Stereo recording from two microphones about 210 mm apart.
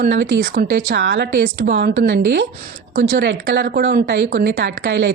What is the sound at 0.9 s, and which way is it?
Speech, 55° right (ahead or behind).